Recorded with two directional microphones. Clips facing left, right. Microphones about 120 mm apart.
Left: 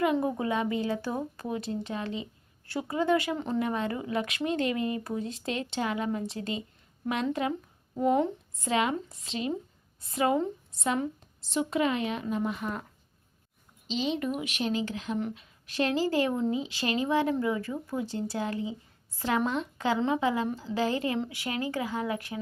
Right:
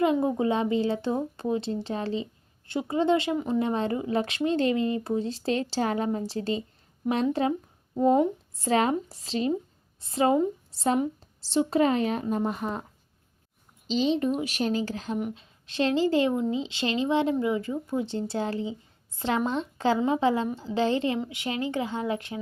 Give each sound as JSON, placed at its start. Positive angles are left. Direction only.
{"t": 0.0, "sound": "speech", "side_deg": -25}
{"t": 3.3, "sound": "speech", "side_deg": -10}
{"t": 3.6, "sound": "speech", "side_deg": -30}
{"t": 13.8, "sound": "speech", "side_deg": -35}